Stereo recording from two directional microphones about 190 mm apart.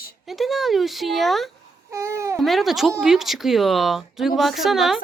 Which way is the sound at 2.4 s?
Centre (ahead or behind).